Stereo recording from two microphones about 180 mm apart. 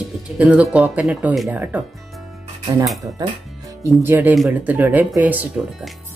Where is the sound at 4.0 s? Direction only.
10° right (ahead or behind).